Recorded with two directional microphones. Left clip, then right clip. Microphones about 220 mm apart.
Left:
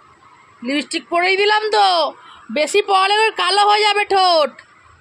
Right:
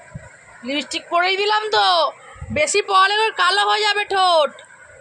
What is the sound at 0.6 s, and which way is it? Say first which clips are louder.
Speech: left 3 dB; 60° left (ahead or behind).